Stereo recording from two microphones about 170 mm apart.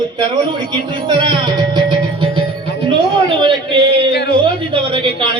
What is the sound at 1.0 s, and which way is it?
Speech, 25° right (ahead or behind).